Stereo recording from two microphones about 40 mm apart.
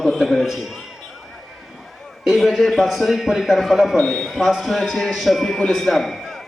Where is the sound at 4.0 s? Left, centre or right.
Centre.